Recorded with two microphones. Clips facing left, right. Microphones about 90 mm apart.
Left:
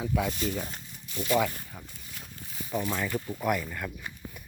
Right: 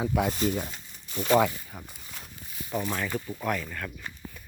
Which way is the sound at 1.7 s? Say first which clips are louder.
Right 2 dB; 15° right (ahead or behind).